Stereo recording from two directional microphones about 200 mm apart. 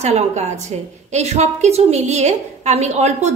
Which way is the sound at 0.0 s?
35° right (ahead or behind).